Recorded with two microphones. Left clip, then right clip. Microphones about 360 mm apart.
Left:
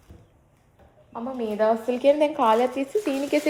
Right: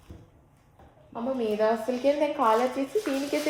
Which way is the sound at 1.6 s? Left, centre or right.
Left.